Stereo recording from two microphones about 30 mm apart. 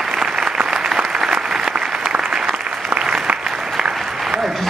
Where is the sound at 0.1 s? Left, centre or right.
Centre.